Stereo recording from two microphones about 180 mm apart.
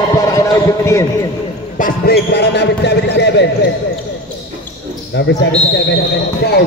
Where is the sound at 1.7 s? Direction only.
55° left (ahead or behind); by 3.5 s 75° left (ahead or behind).